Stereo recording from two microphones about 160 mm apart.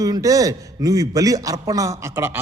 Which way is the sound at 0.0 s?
20° right (ahead or behind).